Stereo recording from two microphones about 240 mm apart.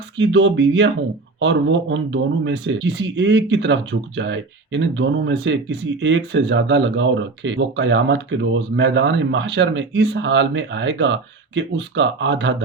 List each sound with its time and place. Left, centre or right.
0.2 s speech: right